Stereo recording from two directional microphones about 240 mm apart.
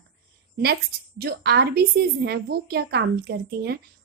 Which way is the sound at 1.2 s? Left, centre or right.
Right.